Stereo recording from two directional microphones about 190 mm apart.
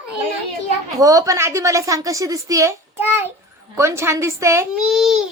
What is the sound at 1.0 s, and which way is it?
A child's voice, 15° right (ahead or behind).